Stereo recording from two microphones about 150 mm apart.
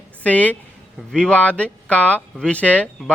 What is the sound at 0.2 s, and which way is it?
A woman's voice, 10° left (ahead or behind).